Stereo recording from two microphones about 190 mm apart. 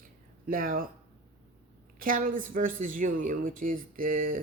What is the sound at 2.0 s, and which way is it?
Speech, 45° right (ahead or behind).